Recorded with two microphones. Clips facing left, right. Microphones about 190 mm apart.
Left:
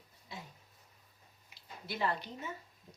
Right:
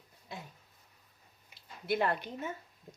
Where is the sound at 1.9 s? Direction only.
55° right (ahead or behind).